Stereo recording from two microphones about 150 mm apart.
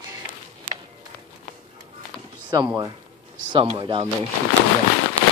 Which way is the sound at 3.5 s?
35° right (ahead or behind).